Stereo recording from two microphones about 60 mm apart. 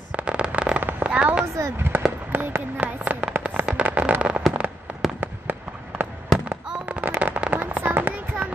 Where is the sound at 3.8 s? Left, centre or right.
Right.